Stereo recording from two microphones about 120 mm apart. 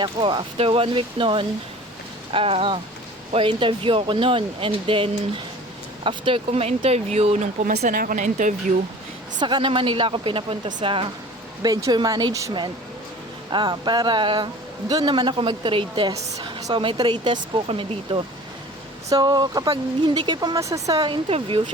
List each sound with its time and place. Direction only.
0.0 s speech: 40° right (ahead or behind); by 8.5 s 90° right
9.4 s speech: 40° right (ahead or behind)
11.6 s a man's voice: 30° right (ahead or behind)
13.5 s a man's voice: 40° right (ahead or behind)
16.4 s a sound: 35° right (ahead or behind)
16.8 s speech: 40° right (ahead or behind)
19.1 s a man's voice: 35° right (ahead or behind)
20.6 s speech: 25° right (ahead or behind)
21.2 s speech: 55° right (ahead or behind)